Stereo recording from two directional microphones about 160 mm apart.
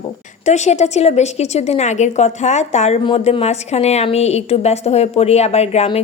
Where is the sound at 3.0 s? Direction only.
35° left (ahead or behind).